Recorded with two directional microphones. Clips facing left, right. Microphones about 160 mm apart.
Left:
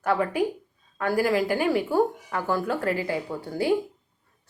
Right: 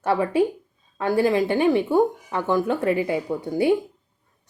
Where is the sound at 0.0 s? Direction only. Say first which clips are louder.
Right 4 dB; 25° right (ahead or behind).